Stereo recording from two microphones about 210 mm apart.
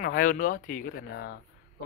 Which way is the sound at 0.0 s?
40° left (ahead or behind).